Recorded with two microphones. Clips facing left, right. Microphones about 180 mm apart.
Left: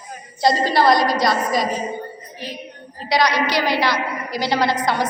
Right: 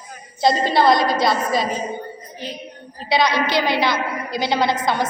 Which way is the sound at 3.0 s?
25° right (ahead or behind).